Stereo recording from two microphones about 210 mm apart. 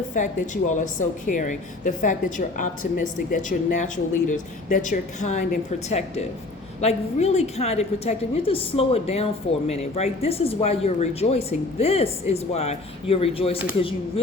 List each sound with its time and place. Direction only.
0.1 s a woman's voice: 35° left (ahead or behind)